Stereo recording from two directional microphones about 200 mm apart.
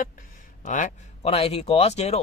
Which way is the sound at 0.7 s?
40° left (ahead or behind).